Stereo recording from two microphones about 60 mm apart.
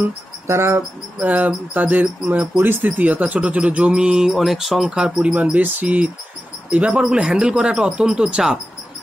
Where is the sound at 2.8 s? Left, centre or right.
Right; by 5.3 s centre.